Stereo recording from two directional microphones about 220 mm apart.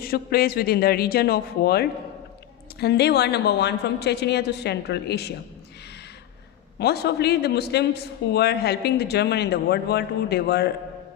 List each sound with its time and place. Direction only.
0.0 s a man's voice: 45° left (ahead or behind)
6.7 s a man's voice: 45° left (ahead or behind)